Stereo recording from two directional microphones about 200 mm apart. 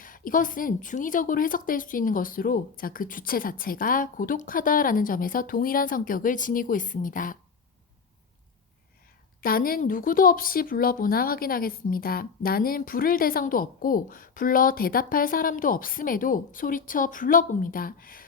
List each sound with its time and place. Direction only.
0.0 s speech: 45° left (ahead or behind)
9.4 s speech: 45° left (ahead or behind)